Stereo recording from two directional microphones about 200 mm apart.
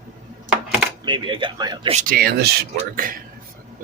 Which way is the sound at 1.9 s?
45° right (ahead or behind).